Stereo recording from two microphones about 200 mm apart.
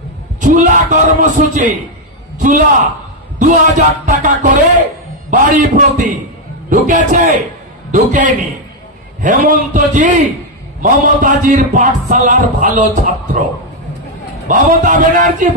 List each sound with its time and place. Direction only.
0.4 s a man's voice: 40° right (ahead or behind)
14.5 s a man's voice: 40° right (ahead or behind)